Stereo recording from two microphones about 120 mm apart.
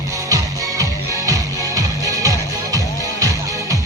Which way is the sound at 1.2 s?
30° right (ahead or behind).